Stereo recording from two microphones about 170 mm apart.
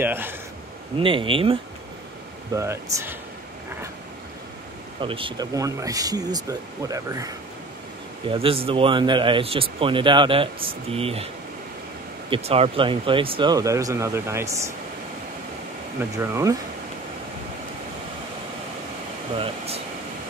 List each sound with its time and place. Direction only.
0.0 s speech: 10° right (ahead or behind)
0.9 s speech: 30° right (ahead or behind)
2.5 s speech: 15° right (ahead or behind)
5.0 s speech: 30° right (ahead or behind)
5.5 s speech: 20° right (ahead or behind)
8.3 s speech: 35° right (ahead or behind)
12.3 s speech: 35° right (ahead or behind); by 14.7 s 15° right (ahead or behind)
16.2 s speech: 15° right (ahead or behind)
19.3 s speech: 35° right (ahead or behind)